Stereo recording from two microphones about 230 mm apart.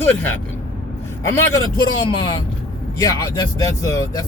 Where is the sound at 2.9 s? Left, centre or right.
Centre.